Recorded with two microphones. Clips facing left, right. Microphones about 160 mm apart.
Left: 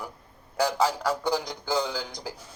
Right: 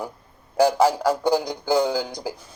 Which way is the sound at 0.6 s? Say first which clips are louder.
Right 7 dB; 30° right (ahead or behind).